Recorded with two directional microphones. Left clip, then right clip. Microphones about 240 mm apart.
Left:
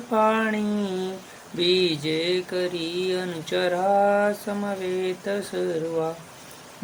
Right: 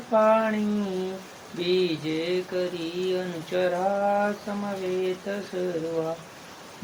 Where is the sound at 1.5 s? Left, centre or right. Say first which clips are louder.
Left 3 dB; left.